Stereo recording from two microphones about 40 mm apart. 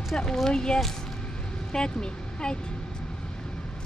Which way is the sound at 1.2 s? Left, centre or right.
Left.